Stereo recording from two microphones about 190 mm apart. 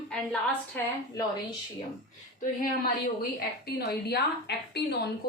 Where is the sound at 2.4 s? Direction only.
50° left (ahead or behind).